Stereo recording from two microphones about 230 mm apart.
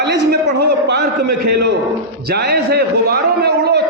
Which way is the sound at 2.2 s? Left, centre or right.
Right.